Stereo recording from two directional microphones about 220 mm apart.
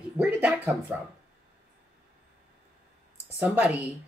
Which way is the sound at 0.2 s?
5° right (ahead or behind).